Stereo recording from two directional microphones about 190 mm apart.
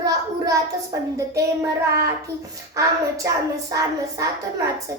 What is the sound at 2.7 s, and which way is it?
Speech, 20° right (ahead or behind).